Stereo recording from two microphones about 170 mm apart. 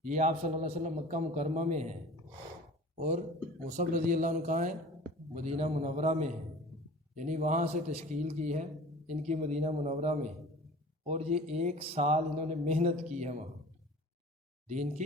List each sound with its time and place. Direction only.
0.0 s a man's voice: 45° right (ahead or behind)
3.7 s a man's voice: 45° right (ahead or behind)
14.7 s a man's voice: 45° right (ahead or behind)